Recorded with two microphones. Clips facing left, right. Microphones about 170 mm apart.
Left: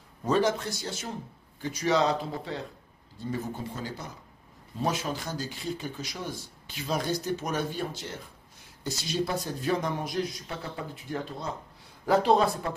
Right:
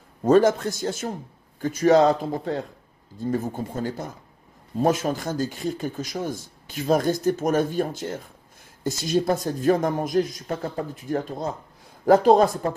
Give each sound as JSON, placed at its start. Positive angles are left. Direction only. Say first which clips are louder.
{"t": 0.2, "sound": "speech", "louder": "right 8 dB", "side_deg": -50}